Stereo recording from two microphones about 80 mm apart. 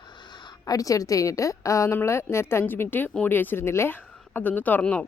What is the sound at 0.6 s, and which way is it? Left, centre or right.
A woman's voice, left.